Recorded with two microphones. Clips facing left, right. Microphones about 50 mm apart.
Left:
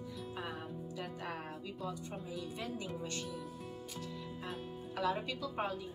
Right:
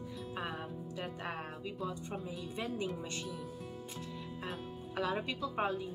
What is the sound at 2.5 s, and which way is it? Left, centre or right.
Speech, right.